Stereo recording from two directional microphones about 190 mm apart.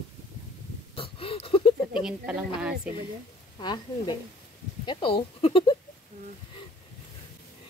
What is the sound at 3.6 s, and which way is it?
Speech, 25° left (ahead or behind).